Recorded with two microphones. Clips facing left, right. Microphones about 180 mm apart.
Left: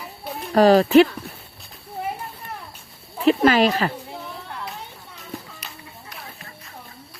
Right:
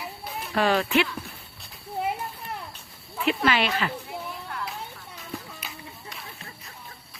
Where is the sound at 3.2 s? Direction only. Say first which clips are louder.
Left 8 dB; 40° left (ahead or behind).